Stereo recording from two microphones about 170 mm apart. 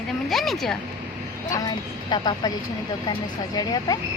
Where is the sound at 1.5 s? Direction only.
25° left (ahead or behind).